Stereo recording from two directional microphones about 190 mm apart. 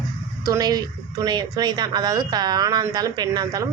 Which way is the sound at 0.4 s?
20° right (ahead or behind).